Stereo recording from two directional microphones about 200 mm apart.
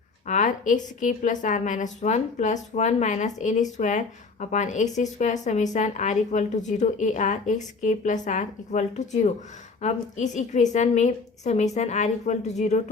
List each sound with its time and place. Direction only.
0.3 s a woman's voice: 40° left (ahead or behind)